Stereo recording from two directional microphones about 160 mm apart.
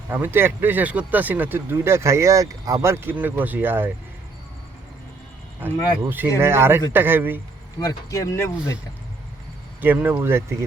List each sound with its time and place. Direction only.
0.1 s speech: 15° right (ahead or behind)
5.5 s speech: 15° right (ahead or behind)
7.8 s speech: 20° left (ahead or behind)
9.8 s speech: 10° right (ahead or behind)